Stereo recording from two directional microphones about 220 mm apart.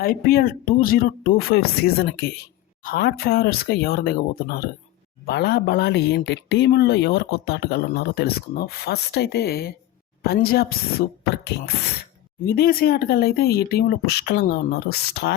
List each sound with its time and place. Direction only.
0.0 s speech: 45° left (ahead or behind)
2.8 s speech: 45° left (ahead or behind)